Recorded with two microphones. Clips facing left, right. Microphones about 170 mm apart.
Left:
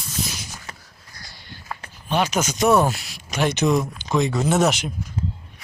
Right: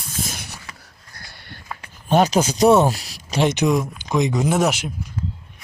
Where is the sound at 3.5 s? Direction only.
15° right (ahead or behind).